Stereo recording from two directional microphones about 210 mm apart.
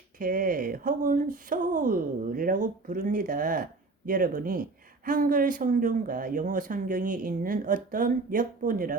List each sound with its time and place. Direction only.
0.2 s speech: 40° right (ahead or behind)